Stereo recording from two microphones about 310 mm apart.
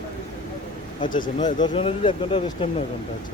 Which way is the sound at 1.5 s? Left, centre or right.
Left.